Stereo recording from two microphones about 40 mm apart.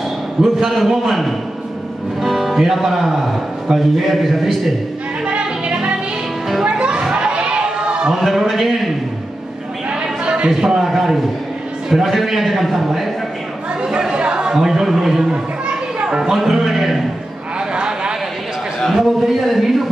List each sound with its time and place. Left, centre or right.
0.7 s a man's voice: centre
2.2 s a man's voice: centre
5.2 s music: right
6.6 s a sound: right
8.1 s a man's voice: centre
10.2 s a sound: right
10.5 s a man's voice: centre
13.8 s speech: centre
15.2 s children playing: right
16.2 s a man's voice: centre
17.6 s a sound: right
18.9 s a man's voice: centre